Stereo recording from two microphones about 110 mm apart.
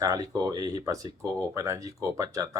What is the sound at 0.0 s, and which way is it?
Speech, 35° right (ahead or behind).